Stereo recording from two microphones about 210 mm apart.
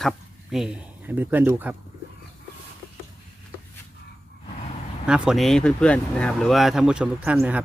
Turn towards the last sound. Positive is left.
turn(degrees=-5)  # may be behind; listen again after turning